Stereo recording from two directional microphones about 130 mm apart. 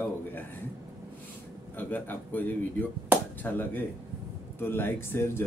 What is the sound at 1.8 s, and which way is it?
Speech, 15° left (ahead or behind).